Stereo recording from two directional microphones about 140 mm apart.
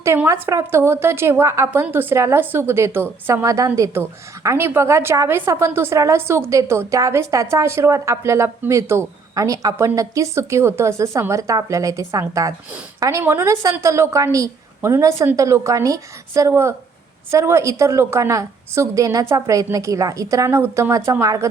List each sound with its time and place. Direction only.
0.3 s a woman's voice: 20° right (ahead or behind)